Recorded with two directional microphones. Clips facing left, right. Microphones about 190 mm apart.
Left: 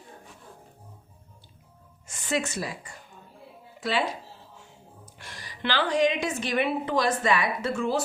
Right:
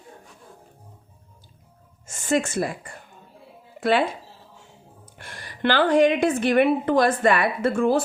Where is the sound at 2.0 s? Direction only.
45° right (ahead or behind).